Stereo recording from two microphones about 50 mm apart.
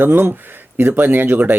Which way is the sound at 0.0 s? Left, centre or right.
Right.